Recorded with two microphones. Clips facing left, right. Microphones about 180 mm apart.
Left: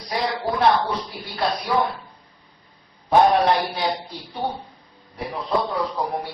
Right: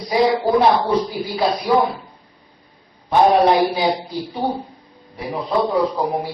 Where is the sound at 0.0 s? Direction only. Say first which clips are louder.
Right 8 dB; centre (ahead or behind).